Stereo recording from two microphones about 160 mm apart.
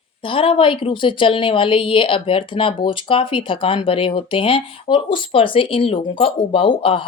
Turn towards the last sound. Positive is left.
turn(degrees=35)  # may be behind; listen again after turning